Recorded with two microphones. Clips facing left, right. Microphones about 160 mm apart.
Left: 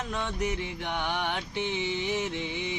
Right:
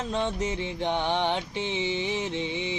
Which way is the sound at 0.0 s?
25° right (ahead or behind).